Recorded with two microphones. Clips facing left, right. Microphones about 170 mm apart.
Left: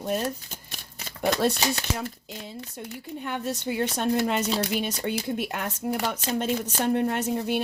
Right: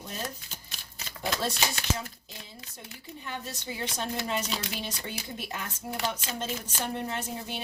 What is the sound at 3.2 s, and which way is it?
Speech, 60° left (ahead or behind).